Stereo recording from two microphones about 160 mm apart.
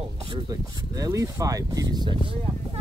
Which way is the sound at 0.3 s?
20° right (ahead or behind).